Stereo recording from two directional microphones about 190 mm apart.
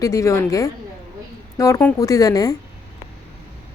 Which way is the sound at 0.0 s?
15° left (ahead or behind).